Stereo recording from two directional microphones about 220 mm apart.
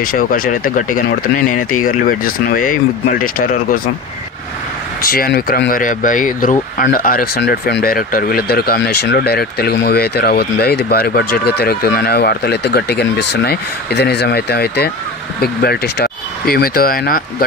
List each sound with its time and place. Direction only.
0.0 s speech: 40° left (ahead or behind)
5.0 s speech: 40° left (ahead or behind)